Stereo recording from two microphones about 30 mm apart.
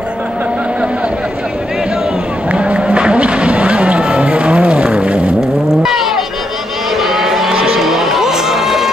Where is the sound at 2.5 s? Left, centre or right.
Right.